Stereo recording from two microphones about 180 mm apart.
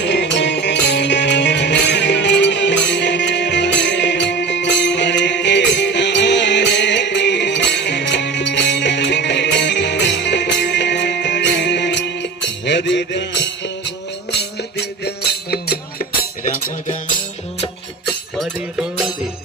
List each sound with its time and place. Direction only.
0.0 s music: 75° left (ahead or behind)
14.8 s music: 65° left (ahead or behind); by 17.0 s 45° left (ahead or behind)